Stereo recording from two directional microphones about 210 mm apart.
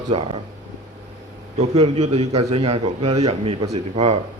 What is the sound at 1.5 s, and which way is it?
A man's voice, 30° right (ahead or behind).